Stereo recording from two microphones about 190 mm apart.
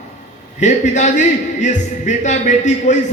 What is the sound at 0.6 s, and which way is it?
A man's voice, 40° left (ahead or behind).